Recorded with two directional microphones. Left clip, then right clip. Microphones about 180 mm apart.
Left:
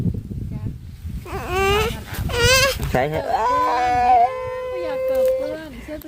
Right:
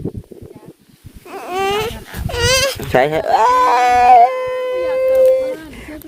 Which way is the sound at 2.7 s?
85° right.